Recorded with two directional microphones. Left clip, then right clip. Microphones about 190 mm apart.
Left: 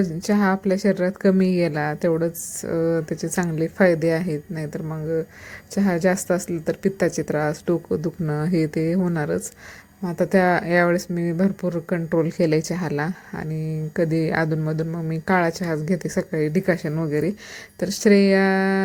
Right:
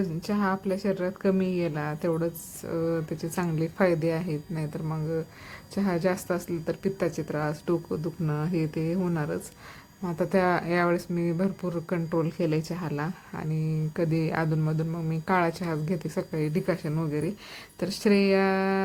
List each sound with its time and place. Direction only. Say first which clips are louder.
0.0 s a woman's voice: left 7 dB; 20° left (ahead or behind)